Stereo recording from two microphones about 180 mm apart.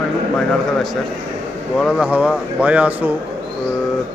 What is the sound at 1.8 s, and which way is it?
Speech, 5° right (ahead or behind).